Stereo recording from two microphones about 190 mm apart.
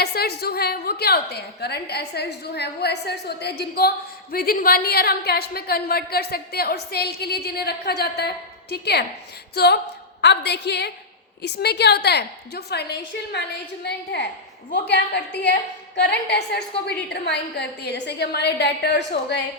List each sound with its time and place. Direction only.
0.0 s a woman's voice: 55° left (ahead or behind)